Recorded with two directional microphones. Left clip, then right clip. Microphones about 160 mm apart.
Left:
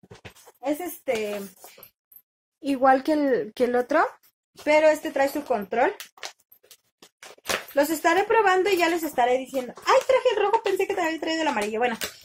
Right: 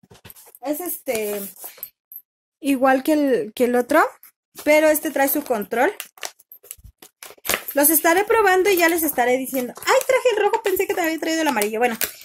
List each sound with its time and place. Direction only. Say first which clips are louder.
0.8 s a woman's voice: right 2 dB; 55° right (ahead or behind)
2.6 s a woman's voice: right 2 dB; 45° right (ahead or behind)
5.9 s a sound: right 5 dB; 35° right (ahead or behind)
7.7 s a woman's voice: right 3 dB; 60° right (ahead or behind)